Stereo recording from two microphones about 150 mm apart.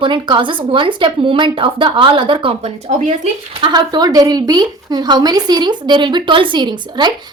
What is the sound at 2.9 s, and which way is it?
Speech, 50° right (ahead or behind).